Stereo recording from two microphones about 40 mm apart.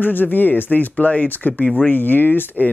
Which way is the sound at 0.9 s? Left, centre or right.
Left.